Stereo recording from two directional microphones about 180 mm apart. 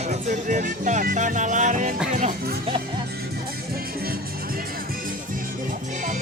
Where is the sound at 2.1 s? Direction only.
50° right (ahead or behind).